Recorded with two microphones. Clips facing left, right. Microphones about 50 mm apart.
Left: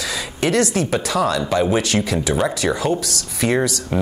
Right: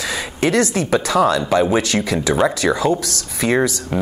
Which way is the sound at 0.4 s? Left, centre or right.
Right.